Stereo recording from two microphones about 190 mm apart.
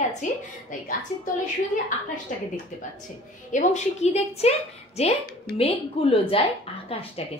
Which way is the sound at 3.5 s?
35° left (ahead or behind).